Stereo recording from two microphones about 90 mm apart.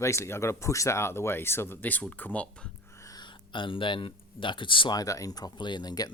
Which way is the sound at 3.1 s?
55° left (ahead or behind).